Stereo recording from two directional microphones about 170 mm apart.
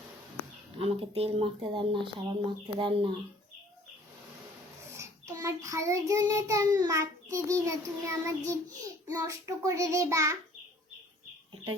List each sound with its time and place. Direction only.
0.8 s speech: 35° right (ahead or behind)
4.9 s child singing: 20° right (ahead or behind)
9.0 s speech: 20° right (ahead or behind)